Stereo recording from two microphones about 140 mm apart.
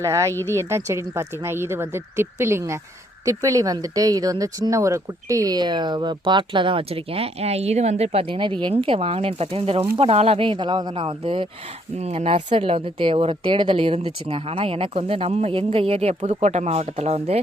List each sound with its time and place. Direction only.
0.0 s a woman's voice: 20° right (ahead or behind); by 17.4 s 50° right (ahead or behind)